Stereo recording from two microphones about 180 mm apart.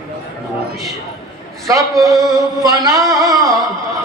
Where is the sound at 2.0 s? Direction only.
20° right (ahead or behind).